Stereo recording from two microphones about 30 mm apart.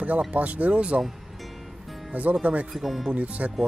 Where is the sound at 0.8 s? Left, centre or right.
Right.